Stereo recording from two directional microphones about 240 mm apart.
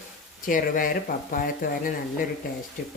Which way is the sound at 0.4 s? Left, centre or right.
Left.